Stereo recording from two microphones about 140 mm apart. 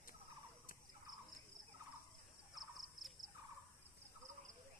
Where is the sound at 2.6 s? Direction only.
Centre (ahead or behind).